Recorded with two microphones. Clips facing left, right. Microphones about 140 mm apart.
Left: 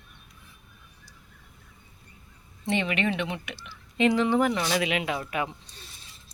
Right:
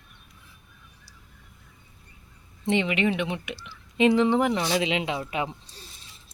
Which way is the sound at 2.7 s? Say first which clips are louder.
Right 3 dB; 20° right (ahead or behind).